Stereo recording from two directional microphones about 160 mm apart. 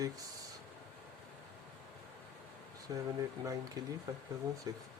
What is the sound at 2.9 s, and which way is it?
Speech, 20° right (ahead or behind).